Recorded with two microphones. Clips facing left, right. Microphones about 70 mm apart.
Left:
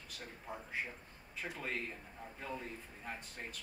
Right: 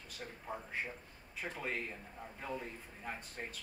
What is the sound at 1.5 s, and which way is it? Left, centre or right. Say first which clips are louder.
A man's voice: right 1 dB; centre.